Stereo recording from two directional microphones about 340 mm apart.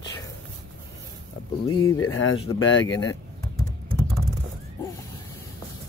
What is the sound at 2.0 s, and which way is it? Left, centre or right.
Speech, left.